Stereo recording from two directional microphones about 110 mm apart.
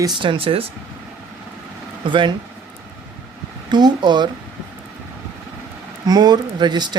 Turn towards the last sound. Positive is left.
turn(degrees=-40)  # may be behind; listen again after turning